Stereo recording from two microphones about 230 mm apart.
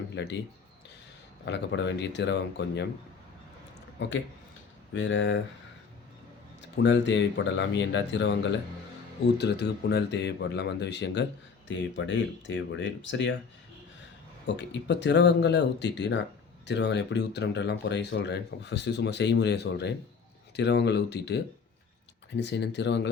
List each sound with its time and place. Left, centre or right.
0.1 s speech: left
1.5 s speech: left
4.0 s speech: left
6.8 s speech: left
14.4 s speech: left